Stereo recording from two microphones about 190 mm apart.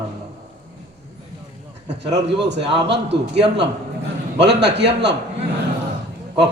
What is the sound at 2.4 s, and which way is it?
Speech, 65° right (ahead or behind).